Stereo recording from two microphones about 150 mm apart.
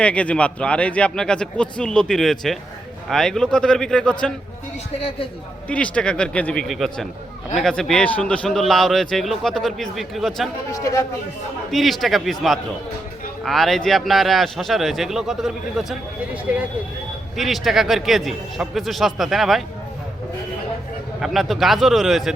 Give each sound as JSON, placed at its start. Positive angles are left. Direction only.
{"t": 0.0, "sound": "a man's voice", "side_deg": 10}
{"t": 4.9, "sound": "a man's voice", "side_deg": 40}
{"t": 5.6, "sound": "a man's voice", "side_deg": 10}
{"t": 10.7, "sound": "speech", "side_deg": 20}
{"t": 11.7, "sound": "a man's voice", "side_deg": 0}
{"t": 21.2, "sound": "a man's voice", "side_deg": 0}